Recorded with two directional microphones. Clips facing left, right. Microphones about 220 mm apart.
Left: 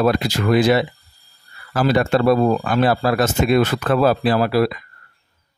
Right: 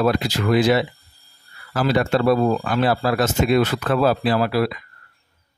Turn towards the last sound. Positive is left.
turn(degrees=45)  # may be behind; listen again after turning